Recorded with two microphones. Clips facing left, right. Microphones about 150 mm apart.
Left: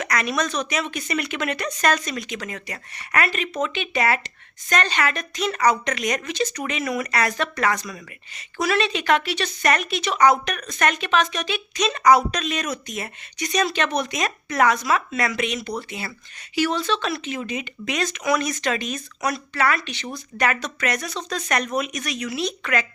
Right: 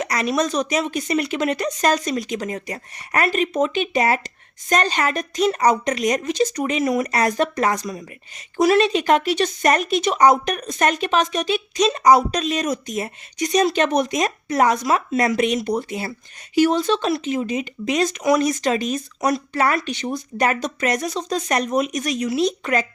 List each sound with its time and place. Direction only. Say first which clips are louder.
0.0 s a woman's voice: right 3 dB; 35° right (ahead or behind)